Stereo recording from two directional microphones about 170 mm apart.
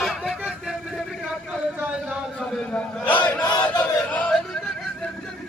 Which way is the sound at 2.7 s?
10° left (ahead or behind).